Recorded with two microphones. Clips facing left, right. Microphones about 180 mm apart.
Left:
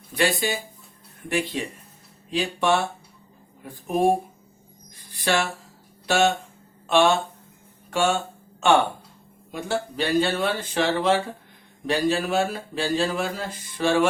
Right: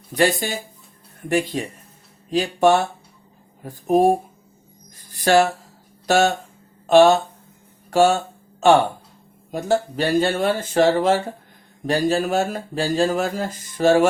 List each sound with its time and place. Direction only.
0.1 s speech: 45° right (ahead or behind)
5.1 s speech: 40° right (ahead or behind)